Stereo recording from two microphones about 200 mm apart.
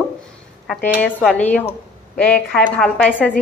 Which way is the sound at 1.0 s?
5° left (ahead or behind).